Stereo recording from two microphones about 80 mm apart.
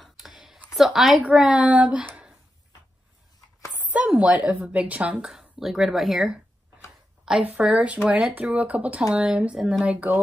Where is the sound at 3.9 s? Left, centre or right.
Centre.